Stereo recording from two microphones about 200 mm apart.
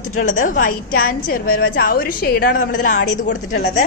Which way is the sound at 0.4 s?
40° left (ahead or behind).